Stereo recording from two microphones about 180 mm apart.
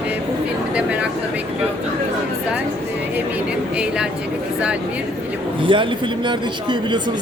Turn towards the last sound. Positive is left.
turn(degrees=-25)  # may be behind; listen again after turning